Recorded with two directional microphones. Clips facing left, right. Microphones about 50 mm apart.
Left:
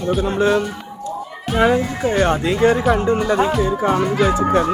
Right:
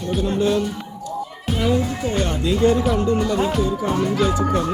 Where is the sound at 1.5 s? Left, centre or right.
Left.